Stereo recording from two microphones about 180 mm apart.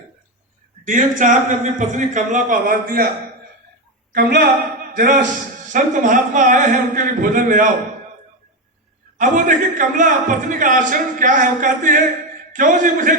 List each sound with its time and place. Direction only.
0.9 s a man's voice: 45° right (ahead or behind)
4.1 s a man's voice: 65° right (ahead or behind); by 7.7 s 50° right (ahead or behind)
9.1 s a man's voice: 45° right (ahead or behind)